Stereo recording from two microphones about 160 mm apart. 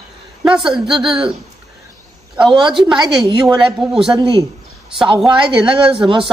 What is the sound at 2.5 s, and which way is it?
Speech, 5° right (ahead or behind).